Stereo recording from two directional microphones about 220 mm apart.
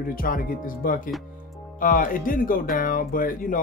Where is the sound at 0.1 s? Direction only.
40° left (ahead or behind).